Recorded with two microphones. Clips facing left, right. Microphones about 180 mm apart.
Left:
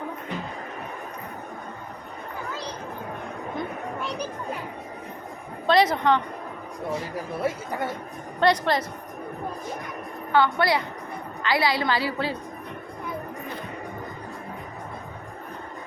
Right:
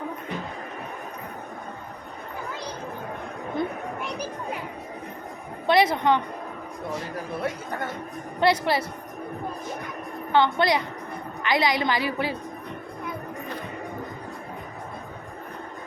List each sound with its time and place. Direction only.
5.6 s a woman's voice: 10° right (ahead or behind)
7.4 s speech: 5° left (ahead or behind)
8.4 s a woman's voice: 10° right (ahead or behind)
10.3 s a woman's voice: 20° right (ahead or behind)